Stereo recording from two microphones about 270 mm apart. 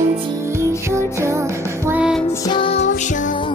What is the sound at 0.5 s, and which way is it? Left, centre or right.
Music, centre.